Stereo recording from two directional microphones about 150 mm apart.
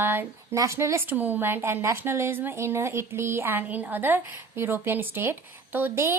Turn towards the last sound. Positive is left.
turn(degrees=-15)  # may be behind; listen again after turning